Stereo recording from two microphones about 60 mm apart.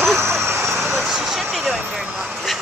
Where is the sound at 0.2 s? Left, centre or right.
Right.